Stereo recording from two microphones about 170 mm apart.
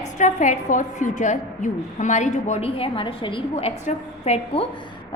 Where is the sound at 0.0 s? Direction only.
45° left (ahead or behind).